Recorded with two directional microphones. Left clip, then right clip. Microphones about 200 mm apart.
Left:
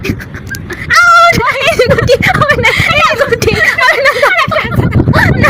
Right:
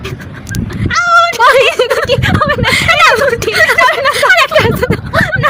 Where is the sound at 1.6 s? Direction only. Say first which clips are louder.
Left 2 dB; 25° left (ahead or behind).